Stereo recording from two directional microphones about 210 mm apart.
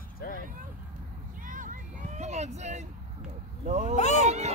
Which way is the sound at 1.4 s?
40° right (ahead or behind).